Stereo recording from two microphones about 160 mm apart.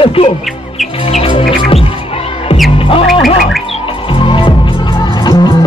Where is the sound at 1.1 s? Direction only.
35° left (ahead or behind).